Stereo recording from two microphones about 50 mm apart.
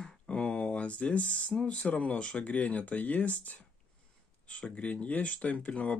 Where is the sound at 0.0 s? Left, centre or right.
Left.